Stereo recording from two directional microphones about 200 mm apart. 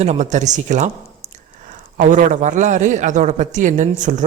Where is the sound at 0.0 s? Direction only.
35° right (ahead or behind).